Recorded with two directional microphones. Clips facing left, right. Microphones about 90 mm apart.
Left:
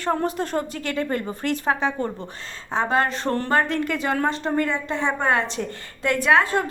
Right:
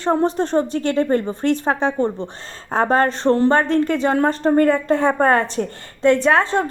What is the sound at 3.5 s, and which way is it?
A woman's voice, 35° right (ahead or behind).